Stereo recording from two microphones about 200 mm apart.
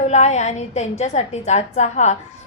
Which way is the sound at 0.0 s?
35° left (ahead or behind).